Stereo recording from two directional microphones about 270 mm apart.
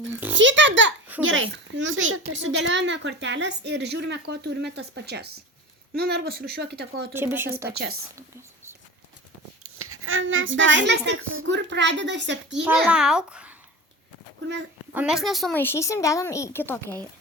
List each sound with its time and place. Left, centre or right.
0.1 s speech: centre
0.3 s a child's voice: right
7.1 s speech: centre
7.7 s a child's voice: right
8.1 s whispering: centre
9.6 s speech: right
12.6 s a child's voice: centre
14.9 s a woman's voice: centre